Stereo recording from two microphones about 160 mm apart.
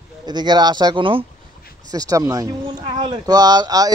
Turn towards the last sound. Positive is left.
turn(degrees=-25)  # may be behind; listen again after turning